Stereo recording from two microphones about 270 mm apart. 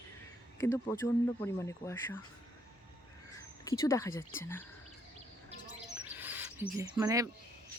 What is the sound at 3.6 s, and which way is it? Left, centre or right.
Speech, centre.